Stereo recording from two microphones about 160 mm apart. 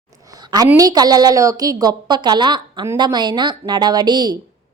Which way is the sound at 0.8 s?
25° right (ahead or behind).